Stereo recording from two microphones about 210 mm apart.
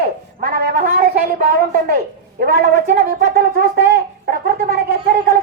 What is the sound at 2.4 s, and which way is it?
A man's voice, 45° right (ahead or behind).